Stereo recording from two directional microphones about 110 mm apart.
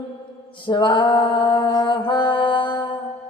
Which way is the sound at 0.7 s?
45° left (ahead or behind).